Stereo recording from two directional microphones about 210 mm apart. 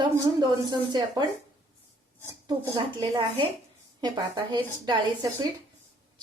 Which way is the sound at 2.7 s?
20° right (ahead or behind).